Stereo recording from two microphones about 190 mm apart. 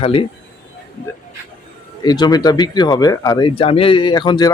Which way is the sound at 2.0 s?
20° left (ahead or behind).